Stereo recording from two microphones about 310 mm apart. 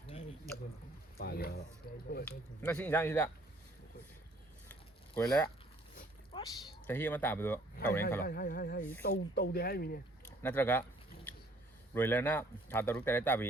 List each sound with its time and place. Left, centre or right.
1.2 s speech: left
2.6 s a man's voice: centre
4.7 s a sound: centre
6.3 s speech: centre
8.2 s speech: left
10.4 s speech: centre
11.9 s speech: centre